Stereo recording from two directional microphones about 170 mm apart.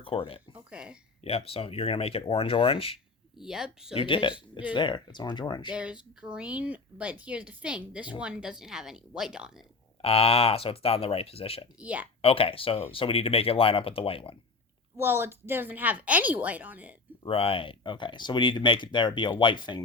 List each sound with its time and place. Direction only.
0.0 s speech: 30° left (ahead or behind)
0.5 s a sound: 5° right (ahead or behind)
1.2 s speech: 35° left (ahead or behind)
3.3 s speech: 5° right (ahead or behind)
3.9 s speech: 30° left (ahead or behind)
5.7 s a woman's voice: 5° right (ahead or behind)
10.0 s speech: 35° left (ahead or behind)
11.8 s a woman's voice: 10° right (ahead or behind)
12.2 s speech: 35° left (ahead or behind)
14.9 s a woman's voice: 15° right (ahead or behind)
17.2 s speech: 35° left (ahead or behind)